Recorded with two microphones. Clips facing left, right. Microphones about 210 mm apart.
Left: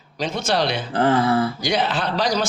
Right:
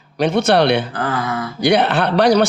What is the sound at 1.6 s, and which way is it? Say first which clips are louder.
Speech: right 7 dB; 65° right (ahead or behind).